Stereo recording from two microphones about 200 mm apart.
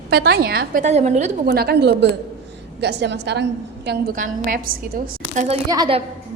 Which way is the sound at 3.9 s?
45° right (ahead or behind).